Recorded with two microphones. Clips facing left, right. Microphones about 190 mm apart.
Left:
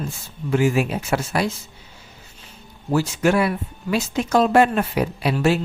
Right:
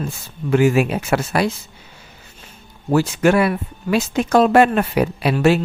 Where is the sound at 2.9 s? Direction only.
65° right (ahead or behind).